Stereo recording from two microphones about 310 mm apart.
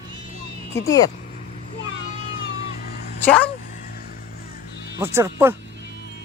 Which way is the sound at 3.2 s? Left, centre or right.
Centre.